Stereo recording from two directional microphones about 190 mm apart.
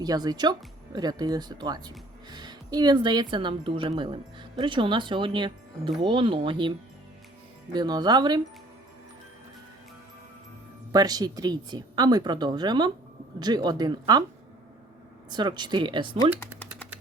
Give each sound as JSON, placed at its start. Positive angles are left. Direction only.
{"t": 0.0, "sound": "a woman's voice", "side_deg": -20}
{"t": 10.9, "sound": "a woman's voice", "side_deg": -20}
{"t": 15.3, "sound": "a woman's voice", "side_deg": -25}